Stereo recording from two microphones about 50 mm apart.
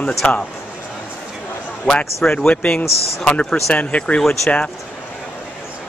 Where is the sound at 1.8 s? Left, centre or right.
Centre.